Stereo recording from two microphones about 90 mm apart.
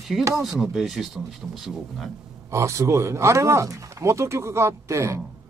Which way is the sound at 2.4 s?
35° right (ahead or behind).